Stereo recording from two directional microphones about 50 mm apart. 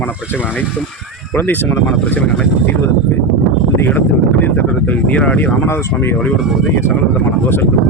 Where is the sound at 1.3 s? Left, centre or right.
Left.